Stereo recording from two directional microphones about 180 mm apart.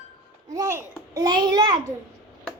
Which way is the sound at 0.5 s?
15° right (ahead or behind).